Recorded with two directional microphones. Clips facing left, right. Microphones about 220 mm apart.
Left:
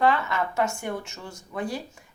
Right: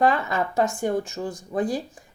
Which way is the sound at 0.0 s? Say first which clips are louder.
Right 2 dB; 35° right (ahead or behind).